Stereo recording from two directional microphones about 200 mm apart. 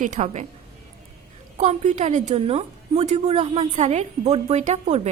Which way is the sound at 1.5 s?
35° right (ahead or behind).